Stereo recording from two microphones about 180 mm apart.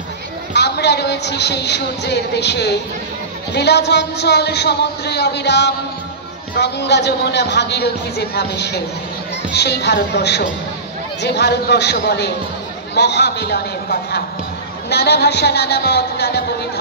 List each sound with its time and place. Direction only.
0.5 s a woman's voice: 70° left (ahead or behind)